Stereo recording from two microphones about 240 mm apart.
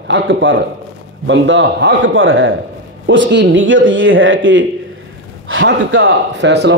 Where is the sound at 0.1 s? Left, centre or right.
Right.